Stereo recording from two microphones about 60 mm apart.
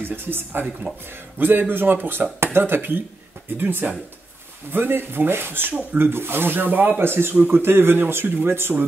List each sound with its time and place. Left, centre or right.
0.0 s speech: right